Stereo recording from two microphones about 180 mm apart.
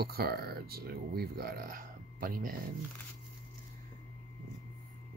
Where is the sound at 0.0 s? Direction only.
60° right (ahead or behind).